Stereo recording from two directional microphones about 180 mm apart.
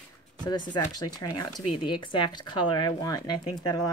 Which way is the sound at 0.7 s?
20° left (ahead or behind).